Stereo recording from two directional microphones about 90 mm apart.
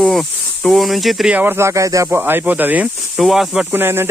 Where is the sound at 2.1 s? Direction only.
25° right (ahead or behind).